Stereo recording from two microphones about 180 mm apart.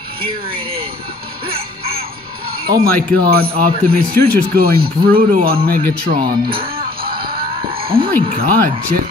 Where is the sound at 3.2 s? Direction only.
55° right (ahead or behind).